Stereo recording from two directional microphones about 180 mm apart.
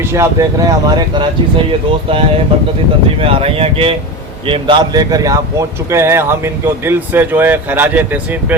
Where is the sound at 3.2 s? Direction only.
30° right (ahead or behind).